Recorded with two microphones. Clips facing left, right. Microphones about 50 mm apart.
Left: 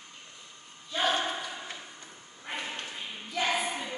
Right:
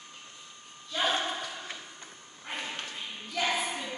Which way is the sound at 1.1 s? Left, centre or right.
Centre.